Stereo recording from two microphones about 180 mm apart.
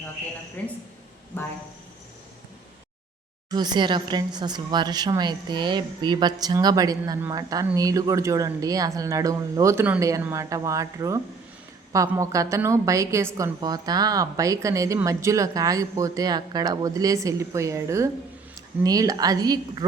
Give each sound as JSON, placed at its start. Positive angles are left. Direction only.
{"t": 0.6, "sound": "a woman's voice", "side_deg": 10}
{"t": 3.5, "sound": "a woman's voice", "side_deg": -25}